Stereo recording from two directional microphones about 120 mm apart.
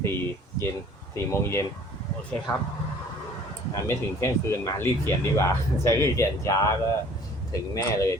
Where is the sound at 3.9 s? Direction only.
20° left (ahead or behind).